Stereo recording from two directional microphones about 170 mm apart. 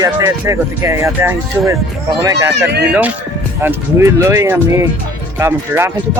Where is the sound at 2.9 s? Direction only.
10° right (ahead or behind).